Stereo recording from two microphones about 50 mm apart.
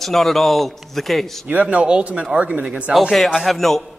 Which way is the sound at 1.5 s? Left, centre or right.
Right.